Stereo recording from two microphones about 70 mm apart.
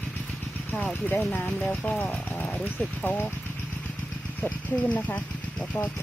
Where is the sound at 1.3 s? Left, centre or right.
Left.